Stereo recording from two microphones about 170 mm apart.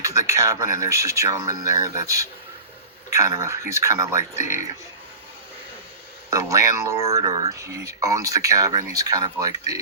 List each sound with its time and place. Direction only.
0.0 s a sound: 20° right (ahead or behind)
0.8 s speech: 20° right (ahead or behind)
3.3 s speech: 15° right (ahead or behind)
6.3 s speech: 20° right (ahead or behind)